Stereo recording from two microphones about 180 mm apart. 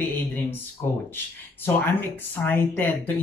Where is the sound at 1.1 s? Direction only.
10° left (ahead or behind).